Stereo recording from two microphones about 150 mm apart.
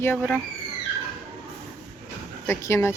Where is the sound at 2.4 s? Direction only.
20° left (ahead or behind).